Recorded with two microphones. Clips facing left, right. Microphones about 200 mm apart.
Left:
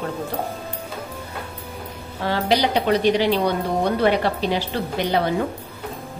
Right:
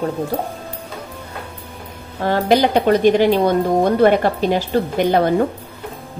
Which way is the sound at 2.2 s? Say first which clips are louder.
Right 5 dB; 50° right (ahead or behind).